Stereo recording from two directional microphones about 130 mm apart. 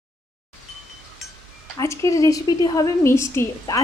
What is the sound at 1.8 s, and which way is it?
A woman's voice, 20° left (ahead or behind).